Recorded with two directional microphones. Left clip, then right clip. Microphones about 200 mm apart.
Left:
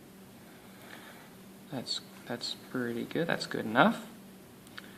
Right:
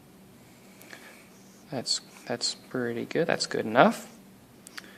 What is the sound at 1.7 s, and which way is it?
Speech, 50° right (ahead or behind).